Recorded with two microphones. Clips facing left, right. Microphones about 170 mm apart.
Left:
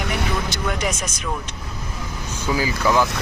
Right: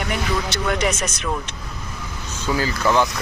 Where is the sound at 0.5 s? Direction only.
70° right (ahead or behind).